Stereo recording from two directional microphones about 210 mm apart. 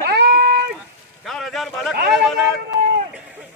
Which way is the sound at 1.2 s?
Centre (ahead or behind).